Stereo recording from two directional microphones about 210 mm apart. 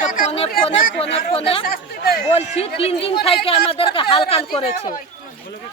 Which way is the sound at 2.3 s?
30° left (ahead or behind).